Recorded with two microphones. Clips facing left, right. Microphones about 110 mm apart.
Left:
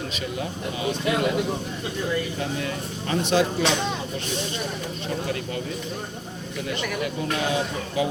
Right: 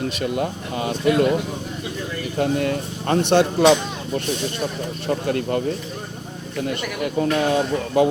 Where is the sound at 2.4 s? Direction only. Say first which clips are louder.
Right 8 dB; 50° right (ahead or behind).